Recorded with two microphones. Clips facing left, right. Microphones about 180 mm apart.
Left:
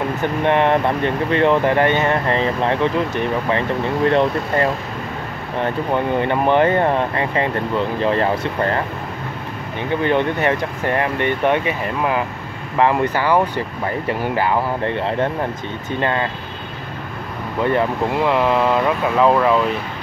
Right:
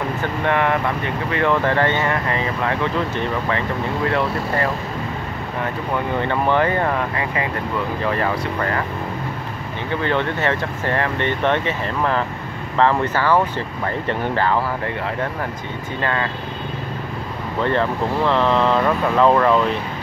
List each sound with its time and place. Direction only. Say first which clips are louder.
0.2 s speech: left 4 dB; 20° left (ahead or behind)
10.0 s speech: left 3 dB; 15° left (ahead or behind)
14.9 s speech: left 4 dB; 25° left (ahead or behind)
17.6 s speech: left 2 dB; 10° left (ahead or behind)